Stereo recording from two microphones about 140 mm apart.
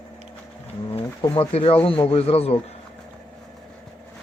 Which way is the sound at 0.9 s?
40° left (ahead or behind).